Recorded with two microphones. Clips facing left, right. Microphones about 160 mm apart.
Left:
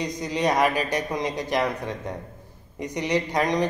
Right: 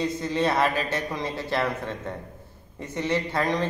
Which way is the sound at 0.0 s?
15° left (ahead or behind).